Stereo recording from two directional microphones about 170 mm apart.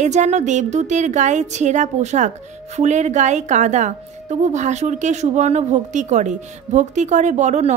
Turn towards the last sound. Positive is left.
turn(degrees=-45)  # may be behind; listen again after turning